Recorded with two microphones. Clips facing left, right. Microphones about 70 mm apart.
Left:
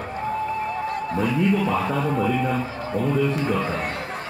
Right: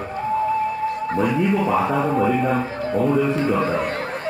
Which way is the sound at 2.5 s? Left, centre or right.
Right.